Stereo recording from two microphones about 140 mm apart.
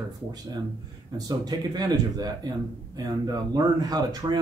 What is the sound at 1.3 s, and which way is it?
Speech, 30° right (ahead or behind).